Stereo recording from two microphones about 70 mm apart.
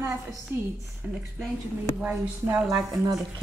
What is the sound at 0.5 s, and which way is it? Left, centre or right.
Speech, right.